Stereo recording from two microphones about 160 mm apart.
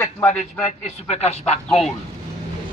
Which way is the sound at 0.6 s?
40° left (ahead or behind).